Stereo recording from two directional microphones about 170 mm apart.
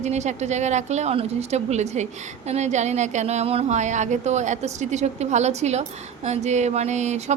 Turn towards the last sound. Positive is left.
turn(degrees=-40)  # may be behind; listen again after turning